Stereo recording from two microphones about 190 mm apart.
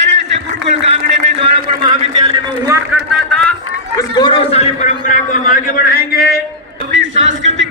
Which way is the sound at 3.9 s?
20° left (ahead or behind).